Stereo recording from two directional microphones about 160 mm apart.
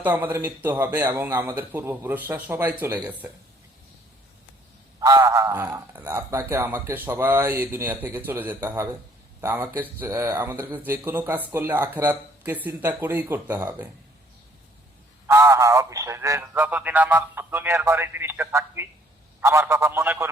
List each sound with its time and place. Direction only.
0.0 s speech: 10° right (ahead or behind)
4.9 s speech: 20° right (ahead or behind)
15.3 s speech: 20° right (ahead or behind)